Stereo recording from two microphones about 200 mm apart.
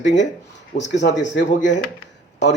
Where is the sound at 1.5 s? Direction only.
40° left (ahead or behind).